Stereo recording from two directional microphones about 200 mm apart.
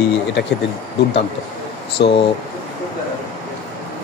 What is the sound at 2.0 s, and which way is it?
Speech, 55° left (ahead or behind).